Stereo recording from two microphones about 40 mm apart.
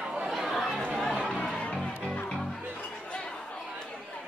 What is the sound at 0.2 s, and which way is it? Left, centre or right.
Chatter, centre.